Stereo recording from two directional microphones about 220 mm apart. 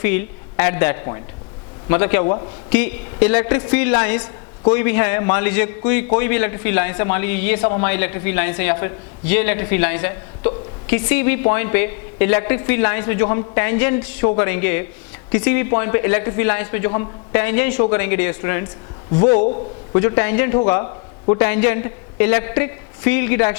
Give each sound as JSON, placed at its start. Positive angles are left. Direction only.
{"t": 0.5, "sound": "a woman's voice", "side_deg": 15}
{"t": 2.2, "sound": "a man's voice", "side_deg": 25}
{"t": 2.6, "sound": "a woman's voice", "side_deg": 15}
{"t": 7.6, "sound": "a man's voice", "side_deg": 25}
{"t": 7.9, "sound": "a woman's voice", "side_deg": 15}
{"t": 17.4, "sound": "a woman's voice", "side_deg": 15}
{"t": 19.2, "sound": "a man's voice", "side_deg": 30}
{"t": 20.0, "sound": "a woman's voice", "side_deg": 20}